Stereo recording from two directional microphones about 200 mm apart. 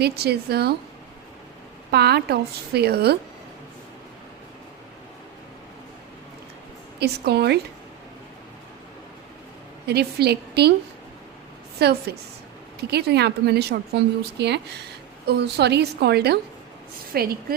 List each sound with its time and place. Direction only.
0.0 s a woman's voice: 55° right (ahead or behind)
1.9 s a woman's voice: 55° right (ahead or behind)
7.0 s a woman's voice: 55° right (ahead or behind)
9.8 s a woman's voice: 55° right (ahead or behind)
11.8 s a woman's voice: 55° right (ahead or behind)